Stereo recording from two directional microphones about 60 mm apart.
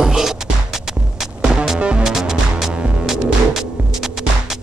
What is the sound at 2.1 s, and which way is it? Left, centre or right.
Music, centre.